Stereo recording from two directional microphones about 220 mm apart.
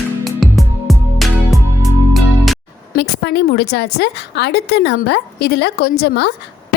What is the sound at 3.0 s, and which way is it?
A woman's voice, 50° left (ahead or behind).